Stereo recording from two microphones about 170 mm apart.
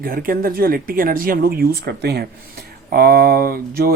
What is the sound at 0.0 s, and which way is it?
Speech, 55° right (ahead or behind).